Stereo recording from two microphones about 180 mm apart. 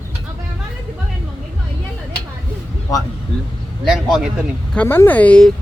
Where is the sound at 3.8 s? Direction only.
Centre (ahead or behind).